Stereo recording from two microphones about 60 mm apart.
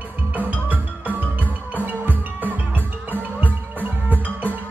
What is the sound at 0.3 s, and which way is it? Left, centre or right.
Music, right.